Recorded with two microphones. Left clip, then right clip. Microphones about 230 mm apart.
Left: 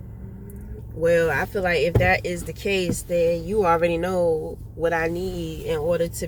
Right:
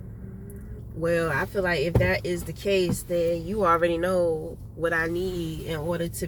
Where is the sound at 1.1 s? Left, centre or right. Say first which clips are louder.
Left 3 dB; centre.